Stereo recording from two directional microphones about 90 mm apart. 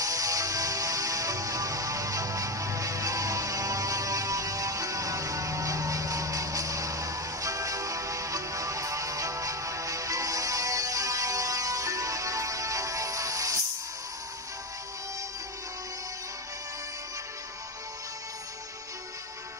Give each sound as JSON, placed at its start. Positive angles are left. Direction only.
{"t": 0.0, "sound": "music", "side_deg": -40}